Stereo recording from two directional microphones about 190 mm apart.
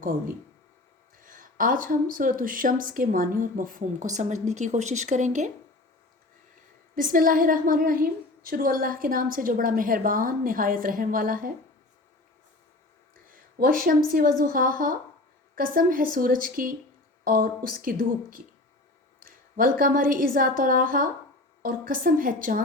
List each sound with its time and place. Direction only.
1.2 s a woman's voice: 45° right (ahead or behind)
6.9 s a woman's voice: 45° right (ahead or behind)
13.3 s a sound: 45° right (ahead or behind)
14.1 s a woman's voice: 50° right (ahead or behind)